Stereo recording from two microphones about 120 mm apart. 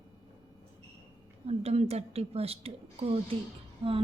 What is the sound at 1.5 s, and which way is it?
A woman's voice, 65° right (ahead or behind).